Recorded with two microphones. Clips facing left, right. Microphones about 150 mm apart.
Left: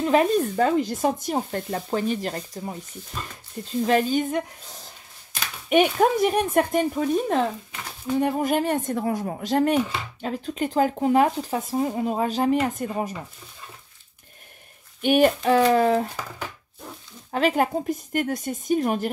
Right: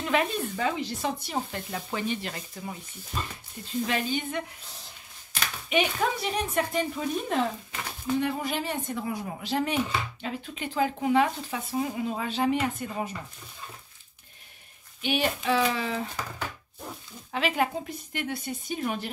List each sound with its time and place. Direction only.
0.0 s speech: 40° left (ahead or behind)
3.8 s speech: 40° left (ahead or behind)
5.7 s speech: 50° left (ahead or behind)
15.0 s speech: 50° left (ahead or behind)
17.3 s speech: 45° left (ahead or behind)